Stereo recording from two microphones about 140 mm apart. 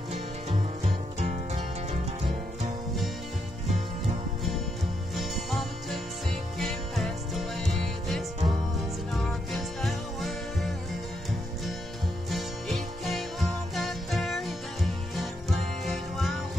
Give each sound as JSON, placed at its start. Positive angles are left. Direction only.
{"t": 1.2, "sound": "music", "side_deg": -50}
{"t": 5.1, "sound": "music", "side_deg": 0}
{"t": 12.3, "sound": "music", "side_deg": 0}